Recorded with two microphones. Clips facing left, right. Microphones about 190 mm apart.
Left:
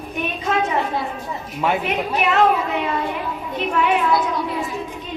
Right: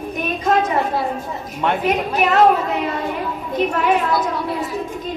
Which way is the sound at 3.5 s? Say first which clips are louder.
Right 2 dB; 40° right (ahead or behind).